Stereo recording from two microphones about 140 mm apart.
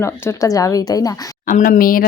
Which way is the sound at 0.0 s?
20° left (ahead or behind).